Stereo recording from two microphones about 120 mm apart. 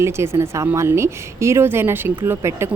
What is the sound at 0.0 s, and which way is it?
Speech, 25° right (ahead or behind).